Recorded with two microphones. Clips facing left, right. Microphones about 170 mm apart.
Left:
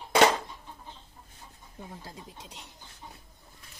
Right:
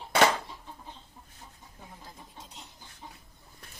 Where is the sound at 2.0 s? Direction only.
80° left.